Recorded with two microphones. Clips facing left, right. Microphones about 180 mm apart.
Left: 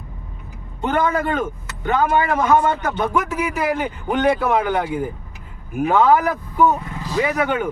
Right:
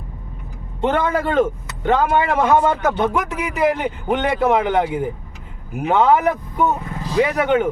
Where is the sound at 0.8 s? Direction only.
30° right (ahead or behind).